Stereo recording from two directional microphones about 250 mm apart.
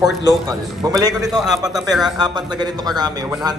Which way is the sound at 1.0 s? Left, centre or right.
Centre.